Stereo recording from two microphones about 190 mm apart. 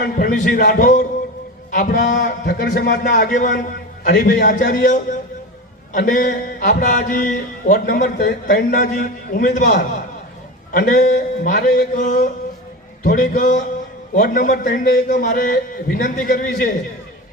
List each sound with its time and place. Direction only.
0.0 s a man's voice: 45° left (ahead or behind)